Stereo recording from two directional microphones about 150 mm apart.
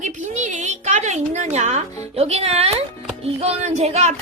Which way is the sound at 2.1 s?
45° right (ahead or behind).